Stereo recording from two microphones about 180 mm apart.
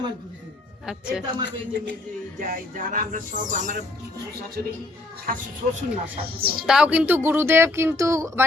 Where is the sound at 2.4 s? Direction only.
50° right (ahead or behind).